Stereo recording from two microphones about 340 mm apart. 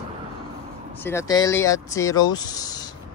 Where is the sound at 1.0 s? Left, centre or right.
Centre.